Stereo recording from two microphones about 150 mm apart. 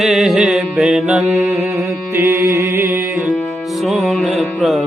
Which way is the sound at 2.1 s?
15° right (ahead or behind).